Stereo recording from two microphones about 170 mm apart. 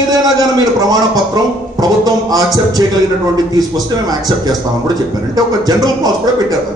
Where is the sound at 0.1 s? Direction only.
20° right (ahead or behind).